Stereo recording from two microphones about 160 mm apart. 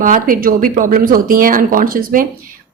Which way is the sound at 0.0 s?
60° right (ahead or behind).